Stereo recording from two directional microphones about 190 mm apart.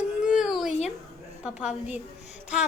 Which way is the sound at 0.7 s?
35° left (ahead or behind).